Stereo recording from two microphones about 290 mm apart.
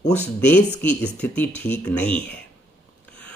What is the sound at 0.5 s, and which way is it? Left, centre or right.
Speech, centre.